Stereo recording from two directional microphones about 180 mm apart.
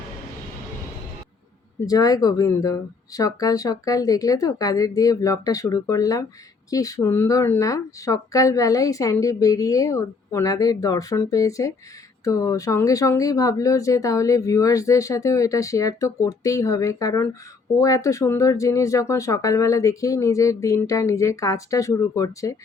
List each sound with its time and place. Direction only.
1.9 s speech: 20° left (ahead or behind)